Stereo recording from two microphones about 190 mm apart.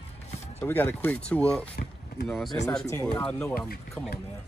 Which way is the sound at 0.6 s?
10° left (ahead or behind).